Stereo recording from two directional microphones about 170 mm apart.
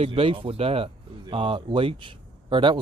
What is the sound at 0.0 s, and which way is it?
Speech, 30° right (ahead or behind).